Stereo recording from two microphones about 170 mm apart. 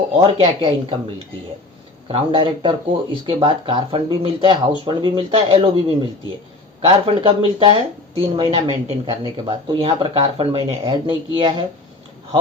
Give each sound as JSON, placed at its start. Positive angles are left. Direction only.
{"t": 0.3, "sound": "speech", "side_deg": -35}
{"t": 2.0, "sound": "speech", "side_deg": -30}